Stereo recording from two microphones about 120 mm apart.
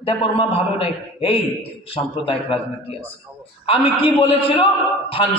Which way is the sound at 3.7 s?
50° left (ahead or behind).